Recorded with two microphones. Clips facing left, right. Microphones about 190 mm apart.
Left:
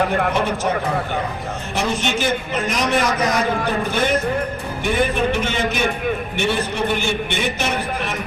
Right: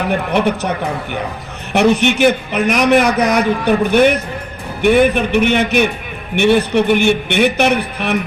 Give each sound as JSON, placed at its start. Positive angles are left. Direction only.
{"t": 0.3, "sound": "a man's voice", "side_deg": -65}
{"t": 1.7, "sound": "a man's voice", "side_deg": -65}